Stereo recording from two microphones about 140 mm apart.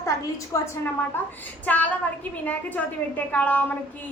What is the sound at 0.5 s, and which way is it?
A woman's voice, 20° left (ahead or behind).